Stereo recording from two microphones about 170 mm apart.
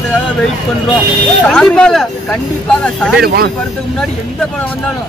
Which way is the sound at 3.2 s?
65° right (ahead or behind).